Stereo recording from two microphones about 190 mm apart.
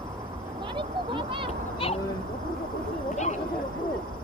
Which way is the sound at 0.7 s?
25° right (ahead or behind).